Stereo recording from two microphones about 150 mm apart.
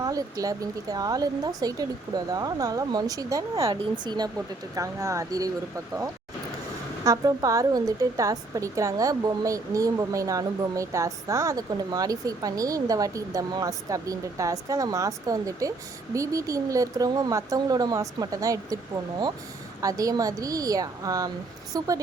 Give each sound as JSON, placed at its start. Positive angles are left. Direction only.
{"t": 0.0, "sound": "a woman's voice", "side_deg": -25}
{"t": 19.8, "sound": "a woman's voice", "side_deg": -25}